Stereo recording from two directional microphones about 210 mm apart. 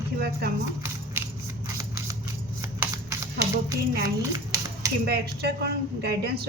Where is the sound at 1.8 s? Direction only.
15° right (ahead or behind).